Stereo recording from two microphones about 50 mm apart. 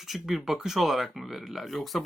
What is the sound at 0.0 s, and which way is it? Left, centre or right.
Speech, centre.